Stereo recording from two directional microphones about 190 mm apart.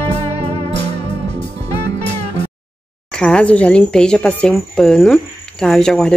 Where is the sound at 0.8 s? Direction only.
35° right (ahead or behind).